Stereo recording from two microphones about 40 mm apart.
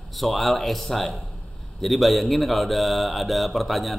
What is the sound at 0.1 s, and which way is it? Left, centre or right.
Speech, centre.